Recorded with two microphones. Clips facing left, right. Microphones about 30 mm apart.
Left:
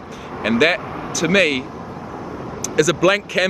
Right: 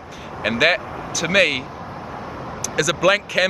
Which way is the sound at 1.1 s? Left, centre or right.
Centre.